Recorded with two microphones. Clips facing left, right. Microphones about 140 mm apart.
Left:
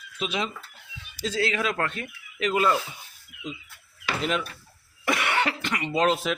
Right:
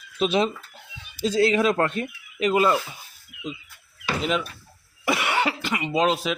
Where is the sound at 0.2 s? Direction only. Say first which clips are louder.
Right 8 dB; 30° right (ahead or behind).